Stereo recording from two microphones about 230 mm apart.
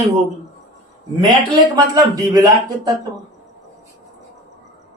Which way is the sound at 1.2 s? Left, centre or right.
Centre.